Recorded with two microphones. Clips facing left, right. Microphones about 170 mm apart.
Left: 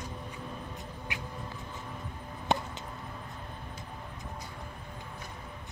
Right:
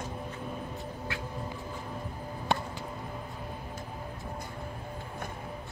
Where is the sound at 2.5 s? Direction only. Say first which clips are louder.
Left 1 dB; 20° left (ahead or behind).